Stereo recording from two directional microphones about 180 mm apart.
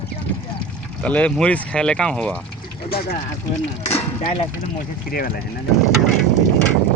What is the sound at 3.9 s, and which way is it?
Speech, 35° left (ahead or behind).